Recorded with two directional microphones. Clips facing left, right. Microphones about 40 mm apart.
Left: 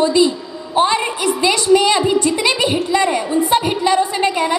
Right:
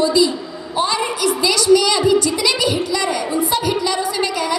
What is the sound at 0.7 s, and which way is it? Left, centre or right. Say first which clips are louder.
A woman's voice: left 3 dB; left.